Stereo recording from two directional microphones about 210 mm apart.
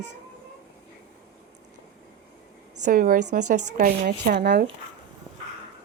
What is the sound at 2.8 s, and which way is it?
Speech, 40° right (ahead or behind).